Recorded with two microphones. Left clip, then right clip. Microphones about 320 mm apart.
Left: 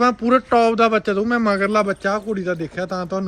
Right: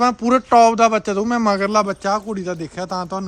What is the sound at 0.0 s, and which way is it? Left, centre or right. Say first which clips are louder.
A man's voice: even; centre.